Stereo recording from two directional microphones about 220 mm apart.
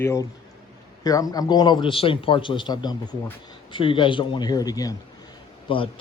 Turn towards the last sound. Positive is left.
turn(degrees=25)  # may be behind; listen again after turning